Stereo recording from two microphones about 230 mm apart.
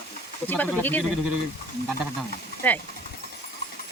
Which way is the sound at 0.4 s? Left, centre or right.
Centre.